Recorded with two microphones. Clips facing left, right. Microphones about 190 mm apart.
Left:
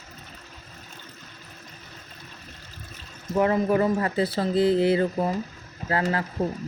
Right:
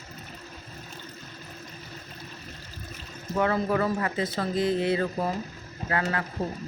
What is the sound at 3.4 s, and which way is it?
Speech, 20° left (ahead or behind).